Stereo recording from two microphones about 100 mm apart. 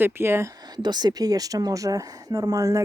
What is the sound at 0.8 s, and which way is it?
Speech, 45° right (ahead or behind).